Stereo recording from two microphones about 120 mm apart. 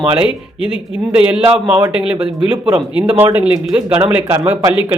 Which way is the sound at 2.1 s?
45° right (ahead or behind).